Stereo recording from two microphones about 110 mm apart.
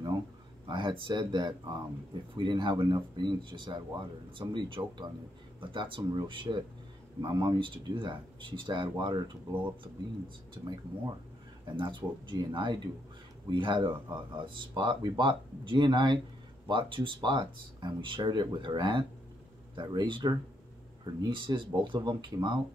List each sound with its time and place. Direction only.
0.7 s speech: 45° right (ahead or behind)
10.5 s speech: 40° right (ahead or behind)